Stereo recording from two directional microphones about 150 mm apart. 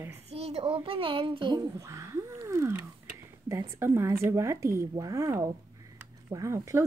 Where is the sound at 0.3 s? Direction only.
45° right (ahead or behind).